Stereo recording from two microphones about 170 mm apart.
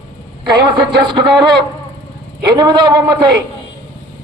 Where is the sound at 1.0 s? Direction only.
30° right (ahead or behind).